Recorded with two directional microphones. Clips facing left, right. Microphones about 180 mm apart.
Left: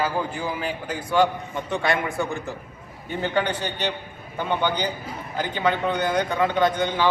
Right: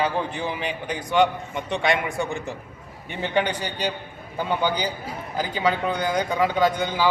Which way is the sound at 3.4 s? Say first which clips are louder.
Even; 10° right (ahead or behind).